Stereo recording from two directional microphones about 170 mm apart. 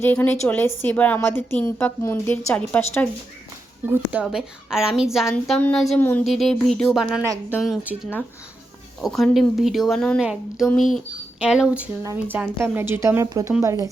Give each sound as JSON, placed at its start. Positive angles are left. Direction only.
{"t": 0.0, "sound": "a woman's voice", "side_deg": 10}
{"t": 3.8, "sound": "a woman's voice", "side_deg": -10}
{"t": 5.3, "sound": "a woman's voice", "side_deg": 10}
{"t": 9.0, "sound": "a woman's voice", "side_deg": 0}